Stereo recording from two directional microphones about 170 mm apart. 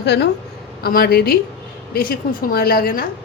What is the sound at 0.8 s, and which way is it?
A woman's voice, 60° left (ahead or behind).